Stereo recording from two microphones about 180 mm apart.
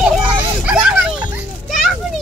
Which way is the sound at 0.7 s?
5° right (ahead or behind).